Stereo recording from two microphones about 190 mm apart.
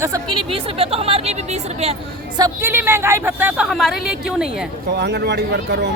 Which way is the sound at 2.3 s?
15° right (ahead or behind).